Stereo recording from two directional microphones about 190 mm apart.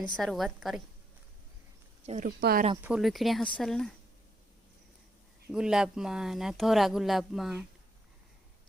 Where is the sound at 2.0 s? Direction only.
35° right (ahead or behind).